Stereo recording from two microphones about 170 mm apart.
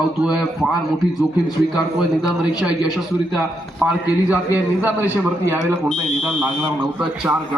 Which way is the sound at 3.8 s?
10° right (ahead or behind).